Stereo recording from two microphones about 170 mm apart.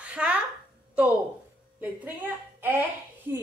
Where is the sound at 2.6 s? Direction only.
10° right (ahead or behind).